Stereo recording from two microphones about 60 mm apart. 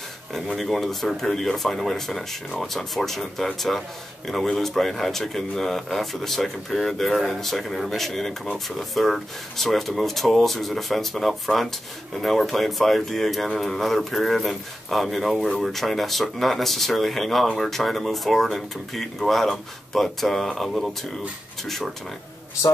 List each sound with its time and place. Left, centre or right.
0.3 s speech: centre